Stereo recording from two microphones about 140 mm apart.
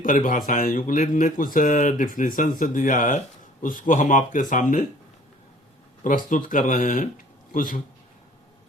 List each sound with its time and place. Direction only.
0.0 s speech: 75° left (ahead or behind)
6.2 s speech: 75° left (ahead or behind)